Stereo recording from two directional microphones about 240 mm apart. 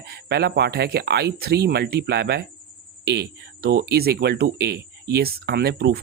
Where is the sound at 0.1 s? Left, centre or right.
Right.